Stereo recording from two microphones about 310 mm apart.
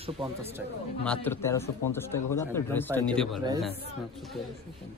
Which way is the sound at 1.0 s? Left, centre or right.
Centre.